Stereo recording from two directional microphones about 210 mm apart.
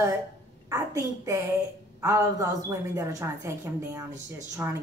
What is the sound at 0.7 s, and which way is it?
A woman's voice, 15° right (ahead or behind).